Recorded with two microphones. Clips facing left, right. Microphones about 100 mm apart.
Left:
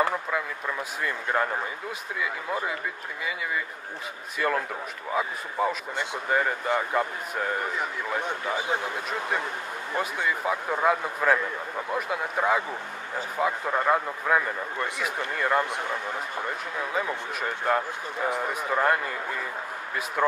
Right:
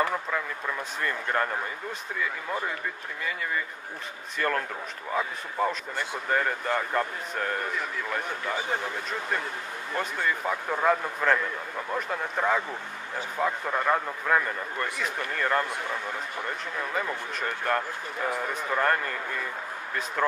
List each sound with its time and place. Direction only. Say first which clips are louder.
1.0 s a man's voice: left 1 dB; 10° left (ahead or behind)
4.4 s a man's voice: left 1 dB; 5° left (ahead or behind)
16.9 s a man's voice: left 2 dB; 10° left (ahead or behind)
20.2 s a man's voice: left 2 dB; 10° left (ahead or behind)